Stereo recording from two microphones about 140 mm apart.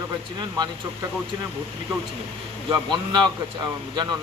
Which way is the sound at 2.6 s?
35° right (ahead or behind).